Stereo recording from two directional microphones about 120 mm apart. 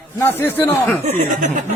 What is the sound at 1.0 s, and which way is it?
Speech, 90° right.